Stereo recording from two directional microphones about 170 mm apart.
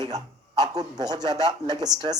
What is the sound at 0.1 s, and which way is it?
A man's voice, 25° right (ahead or behind).